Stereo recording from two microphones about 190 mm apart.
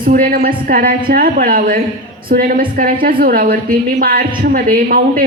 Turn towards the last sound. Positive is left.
turn(degrees=-50)  # may be behind; listen again after turning